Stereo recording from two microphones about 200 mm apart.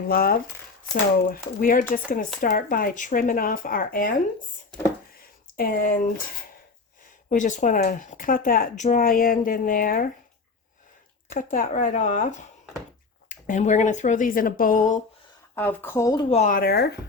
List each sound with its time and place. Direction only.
0.1 s speech: 50° left (ahead or behind)
5.1 s a sound: 45° left (ahead or behind)
7.3 s speech: 40° left (ahead or behind)
11.3 s speech: 40° left (ahead or behind)
15.5 s speech: 10° left (ahead or behind)
16.3 s speech: 40° left (ahead or behind)